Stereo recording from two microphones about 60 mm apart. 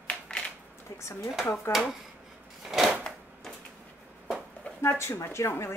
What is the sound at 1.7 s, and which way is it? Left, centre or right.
Speech, left.